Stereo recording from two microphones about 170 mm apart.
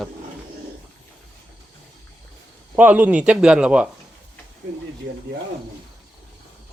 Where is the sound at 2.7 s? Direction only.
10° right (ahead or behind).